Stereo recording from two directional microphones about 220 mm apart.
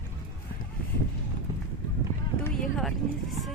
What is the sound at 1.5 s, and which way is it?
Clip-clop, 15° right (ahead or behind).